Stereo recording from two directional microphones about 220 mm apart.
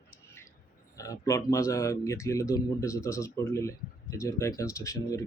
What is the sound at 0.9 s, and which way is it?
Speech, 15° left (ahead or behind).